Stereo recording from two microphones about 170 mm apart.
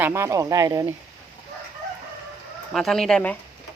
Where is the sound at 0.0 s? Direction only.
15° right (ahead or behind).